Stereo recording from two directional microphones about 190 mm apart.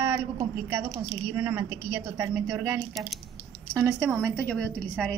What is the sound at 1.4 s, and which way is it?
A woman's voice, 15° right (ahead or behind).